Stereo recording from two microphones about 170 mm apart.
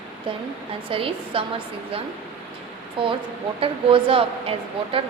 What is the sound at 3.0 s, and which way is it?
A woman's voice, 30° right (ahead or behind).